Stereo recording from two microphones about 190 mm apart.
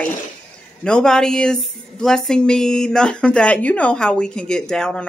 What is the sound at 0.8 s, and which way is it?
Speech, 5° left (ahead or behind).